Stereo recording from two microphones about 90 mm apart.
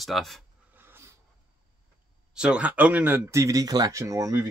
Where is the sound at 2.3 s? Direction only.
10° right (ahead or behind).